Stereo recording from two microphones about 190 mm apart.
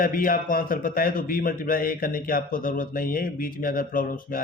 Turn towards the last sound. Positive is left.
turn(degrees=45)  # may be behind; listen again after turning